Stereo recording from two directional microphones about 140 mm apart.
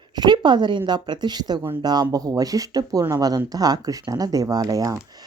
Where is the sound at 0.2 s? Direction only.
30° right (ahead or behind).